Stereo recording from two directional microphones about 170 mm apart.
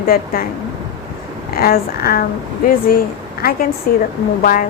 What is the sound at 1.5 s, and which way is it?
A woman's voice, 60° left (ahead or behind).